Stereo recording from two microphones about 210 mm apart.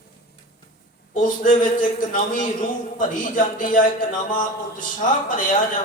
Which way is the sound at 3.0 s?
40° left (ahead or behind).